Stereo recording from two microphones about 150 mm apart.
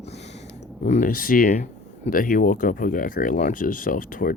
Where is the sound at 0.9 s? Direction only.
50° left (ahead or behind).